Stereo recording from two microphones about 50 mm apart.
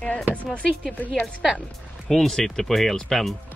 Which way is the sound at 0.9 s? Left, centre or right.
Left.